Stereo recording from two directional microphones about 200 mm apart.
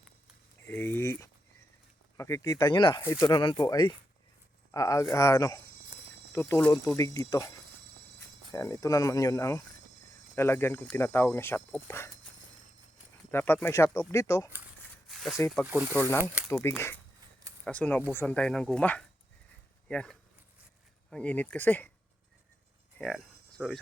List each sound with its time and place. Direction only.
0.7 s speech: 10° left (ahead or behind)
6.9 s speech: 15° left (ahead or behind)
8.5 s speech: 15° left (ahead or behind)
13.3 s speech: 10° left (ahead or behind)
15.0 s snake: centre (ahead or behind)
15.6 s speech: 10° right (ahead or behind)
16.0 s speech: 10° left (ahead or behind)
23.0 s speech: centre (ahead or behind)